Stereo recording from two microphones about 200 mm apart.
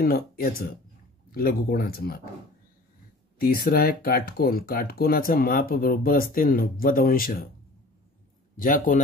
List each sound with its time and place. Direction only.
0.0 s speech: 45° left (ahead or behind)
3.3 s speech: 50° left (ahead or behind)
8.5 s speech: 45° left (ahead or behind)